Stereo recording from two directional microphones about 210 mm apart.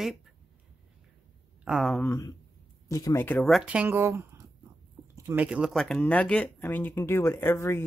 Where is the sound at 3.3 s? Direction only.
Centre (ahead or behind).